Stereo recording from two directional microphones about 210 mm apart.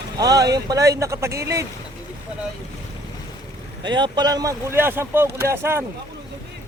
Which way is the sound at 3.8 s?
20° right (ahead or behind).